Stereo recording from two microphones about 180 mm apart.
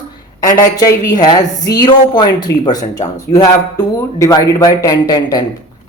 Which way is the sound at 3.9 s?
15° left (ahead or behind).